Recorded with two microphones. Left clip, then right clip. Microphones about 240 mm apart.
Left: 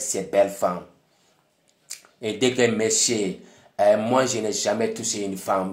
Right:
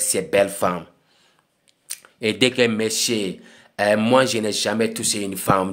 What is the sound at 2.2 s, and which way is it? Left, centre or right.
Speech, right.